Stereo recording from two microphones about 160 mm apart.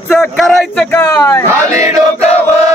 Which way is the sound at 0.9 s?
20° left (ahead or behind).